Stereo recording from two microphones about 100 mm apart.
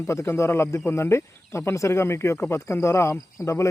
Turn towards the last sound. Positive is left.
turn(degrees=30)  # may be behind; listen again after turning